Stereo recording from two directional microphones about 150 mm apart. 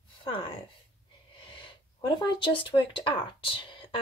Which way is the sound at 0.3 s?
35° left (ahead or behind).